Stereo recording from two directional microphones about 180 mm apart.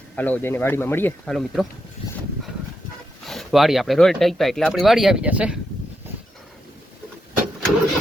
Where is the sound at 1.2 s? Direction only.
Centre (ahead or behind).